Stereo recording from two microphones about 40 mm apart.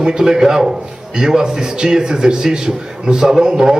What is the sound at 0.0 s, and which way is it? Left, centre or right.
A man's voice, centre.